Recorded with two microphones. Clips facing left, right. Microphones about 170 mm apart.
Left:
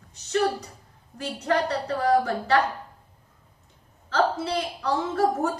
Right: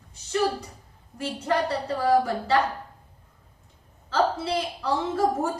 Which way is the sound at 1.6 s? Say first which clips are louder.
Even; 25° right (ahead or behind).